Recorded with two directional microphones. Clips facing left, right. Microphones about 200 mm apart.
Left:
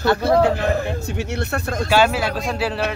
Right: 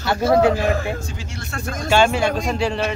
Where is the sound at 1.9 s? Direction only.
5° left (ahead or behind).